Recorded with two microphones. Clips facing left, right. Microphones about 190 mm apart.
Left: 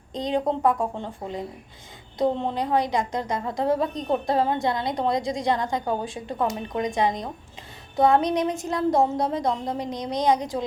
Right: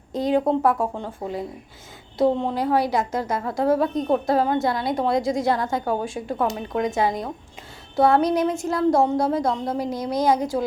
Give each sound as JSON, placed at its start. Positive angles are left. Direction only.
{"t": 0.1, "sound": "speech", "side_deg": -5}